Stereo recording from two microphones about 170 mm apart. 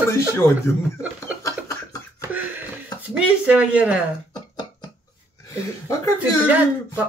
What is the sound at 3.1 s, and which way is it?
Speech, 5° right (ahead or behind).